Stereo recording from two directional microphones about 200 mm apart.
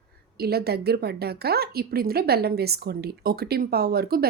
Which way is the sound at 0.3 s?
50° right (ahead or behind).